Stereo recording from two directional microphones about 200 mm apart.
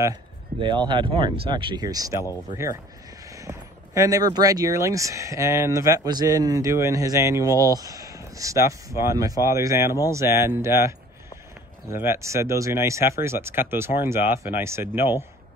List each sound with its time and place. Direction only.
0.0 s speech: 20° right (ahead or behind)
3.3 s speech: 15° right (ahead or behind)